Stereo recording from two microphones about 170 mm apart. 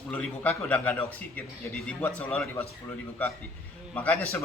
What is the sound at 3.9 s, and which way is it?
Speech, 10° left (ahead or behind).